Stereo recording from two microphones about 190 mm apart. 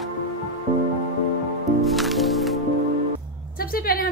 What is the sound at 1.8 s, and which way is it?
Music, centre (ahead or behind).